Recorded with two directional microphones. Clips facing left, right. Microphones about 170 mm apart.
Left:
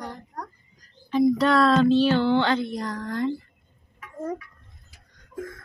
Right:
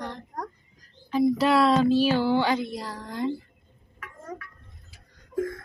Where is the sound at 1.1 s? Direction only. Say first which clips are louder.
Left 2 dB; 5° right (ahead or behind).